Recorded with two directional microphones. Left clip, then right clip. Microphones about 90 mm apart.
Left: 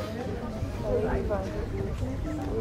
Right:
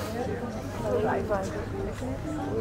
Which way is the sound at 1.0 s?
30° right (ahead or behind).